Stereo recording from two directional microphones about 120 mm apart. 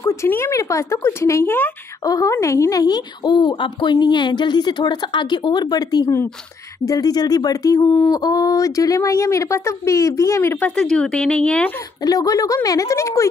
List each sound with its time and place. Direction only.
0.0 s a woman's voice: 25° left (ahead or behind)
10.7 s speech: 5° left (ahead or behind)
12.0 s a woman's voice: 30° left (ahead or behind)